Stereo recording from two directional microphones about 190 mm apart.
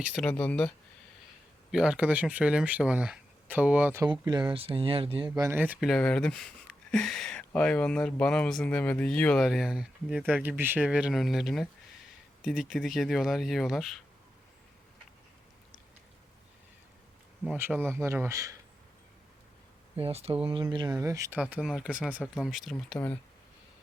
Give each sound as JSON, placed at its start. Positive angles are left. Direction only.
{"t": 0.0, "sound": "speech", "side_deg": 0}
{"t": 1.7, "sound": "speech", "side_deg": -5}
{"t": 4.3, "sound": "speech", "side_deg": -25}
{"t": 5.3, "sound": "speech", "side_deg": -10}
{"t": 17.4, "sound": "speech", "side_deg": -5}
{"t": 20.0, "sound": "speech", "side_deg": -30}